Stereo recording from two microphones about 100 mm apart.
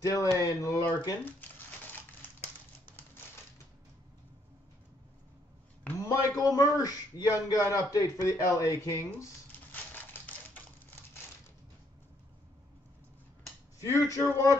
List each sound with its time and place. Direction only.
0.0 s a man's voice: 35° left (ahead or behind)
5.9 s a man's voice: 35° left (ahead or behind)
9.7 s typewriter: 15° left (ahead or behind)
13.7 s a man's voice: 35° left (ahead or behind)